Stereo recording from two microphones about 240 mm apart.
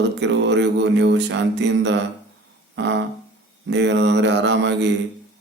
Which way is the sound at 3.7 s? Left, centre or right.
Right.